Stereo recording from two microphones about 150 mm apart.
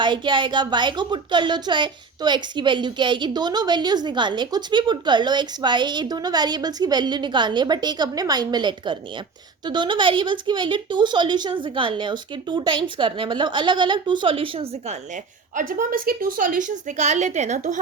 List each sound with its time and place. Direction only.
0.0 s a woman's voice: 30° right (ahead or behind); by 17.7 s 55° right (ahead or behind)